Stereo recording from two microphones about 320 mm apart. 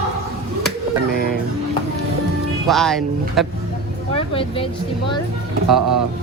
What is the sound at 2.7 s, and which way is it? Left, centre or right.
Speech, centre.